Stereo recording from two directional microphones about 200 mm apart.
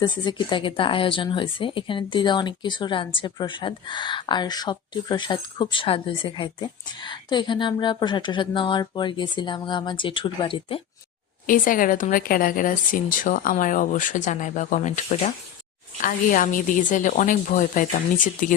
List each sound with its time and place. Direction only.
0.0 s speech: 20° left (ahead or behind)
11.4 s speech: 45° left (ahead or behind)